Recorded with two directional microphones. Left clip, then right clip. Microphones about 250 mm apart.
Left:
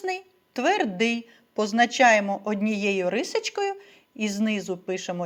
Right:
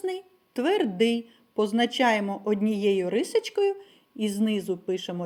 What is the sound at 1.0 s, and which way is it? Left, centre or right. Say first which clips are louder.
Speech: right 1 dB; left.